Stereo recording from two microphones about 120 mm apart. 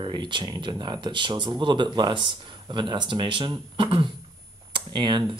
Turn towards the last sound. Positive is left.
turn(degrees=-40)  # may be behind; listen again after turning